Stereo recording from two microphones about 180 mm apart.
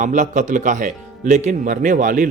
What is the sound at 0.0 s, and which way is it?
Speech, 45° right (ahead or behind).